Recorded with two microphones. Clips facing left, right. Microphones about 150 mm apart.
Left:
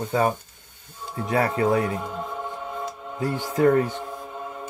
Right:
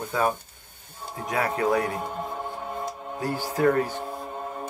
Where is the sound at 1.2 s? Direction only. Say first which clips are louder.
Left 3 dB; 30° left (ahead or behind).